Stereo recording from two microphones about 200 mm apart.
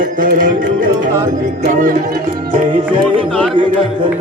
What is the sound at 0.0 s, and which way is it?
Tabla, 40° right (ahead or behind).